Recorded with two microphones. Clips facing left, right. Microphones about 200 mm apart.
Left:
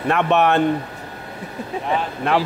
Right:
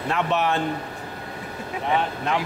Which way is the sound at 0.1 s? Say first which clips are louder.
Left 6 dB; 65° left (ahead or behind).